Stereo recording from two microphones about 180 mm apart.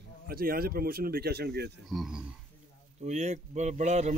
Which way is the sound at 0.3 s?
55° right (ahead or behind).